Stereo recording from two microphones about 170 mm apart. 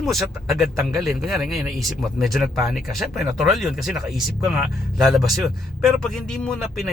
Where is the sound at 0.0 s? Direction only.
Centre (ahead or behind).